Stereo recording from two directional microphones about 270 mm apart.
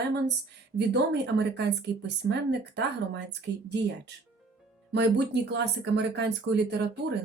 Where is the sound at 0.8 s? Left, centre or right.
Right.